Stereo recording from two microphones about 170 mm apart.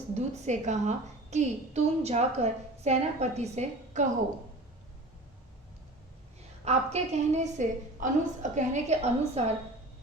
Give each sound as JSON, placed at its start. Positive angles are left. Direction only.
{"t": 0.1, "sound": "a woman's voice", "side_deg": -40}
{"t": 6.7, "sound": "a woman's voice", "side_deg": -40}